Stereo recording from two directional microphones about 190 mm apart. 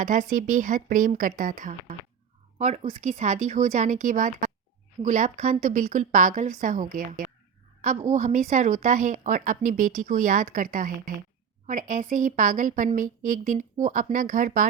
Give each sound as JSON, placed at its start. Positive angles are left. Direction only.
{"t": 0.0, "sound": "a woman's voice", "side_deg": -40}